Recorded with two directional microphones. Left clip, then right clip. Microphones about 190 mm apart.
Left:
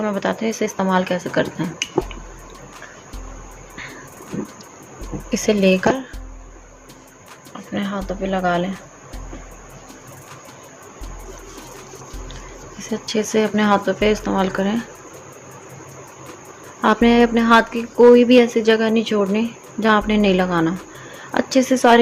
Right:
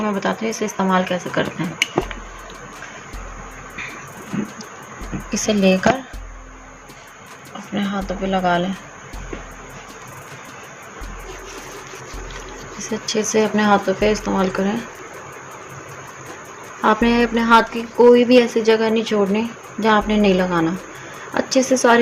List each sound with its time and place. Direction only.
0.0 s speech: 25° left (ahead or behind)
4.3 s a sound: centre (ahead or behind)
5.3 s speech: 30° left (ahead or behind)
7.7 s speech: 25° left (ahead or behind)
12.8 s speech: 25° left (ahead or behind)
16.8 s a woman's voice: 20° left (ahead or behind)